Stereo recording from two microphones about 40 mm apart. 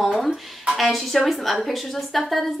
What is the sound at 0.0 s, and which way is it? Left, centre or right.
Music, centre.